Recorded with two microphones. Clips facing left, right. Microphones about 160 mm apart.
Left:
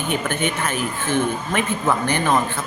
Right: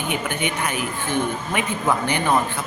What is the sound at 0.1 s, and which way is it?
A man's voice, 15° right (ahead or behind).